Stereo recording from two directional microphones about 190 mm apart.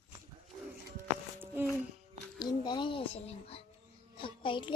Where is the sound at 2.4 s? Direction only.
25° left (ahead or behind).